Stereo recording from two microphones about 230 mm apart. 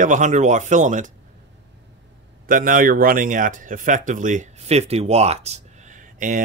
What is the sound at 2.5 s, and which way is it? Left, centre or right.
Speech, right.